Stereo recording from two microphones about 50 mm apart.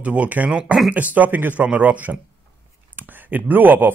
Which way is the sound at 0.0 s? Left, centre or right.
Right.